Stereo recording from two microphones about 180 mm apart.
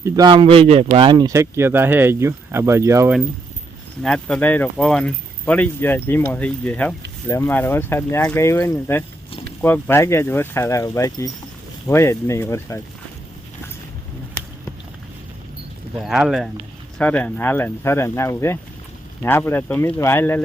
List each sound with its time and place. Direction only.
0.0 s speech: 25° right (ahead or behind)
4.0 s speech: 5° left (ahead or behind)
16.0 s speech: centre (ahead or behind)